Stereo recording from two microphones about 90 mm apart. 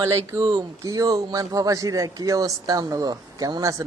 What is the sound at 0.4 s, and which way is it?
A man's voice, 40° right (ahead or behind).